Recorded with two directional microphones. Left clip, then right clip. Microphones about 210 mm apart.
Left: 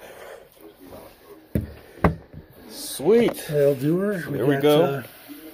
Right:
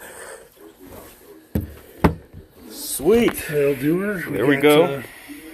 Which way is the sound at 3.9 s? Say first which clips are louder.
Right 2 dB; 15° left (ahead or behind).